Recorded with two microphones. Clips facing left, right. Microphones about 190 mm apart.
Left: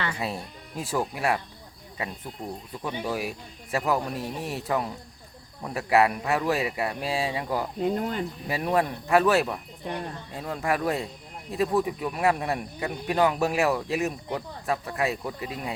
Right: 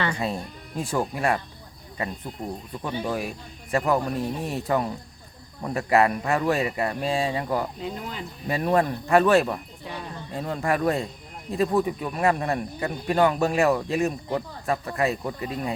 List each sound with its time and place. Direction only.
0.2 s speech: 5° left (ahead or behind)
7.8 s speech: 50° left (ahead or behind)
8.4 s speech: 5° left (ahead or behind)